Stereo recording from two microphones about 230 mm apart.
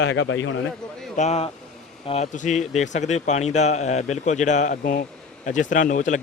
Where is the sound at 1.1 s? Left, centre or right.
Left.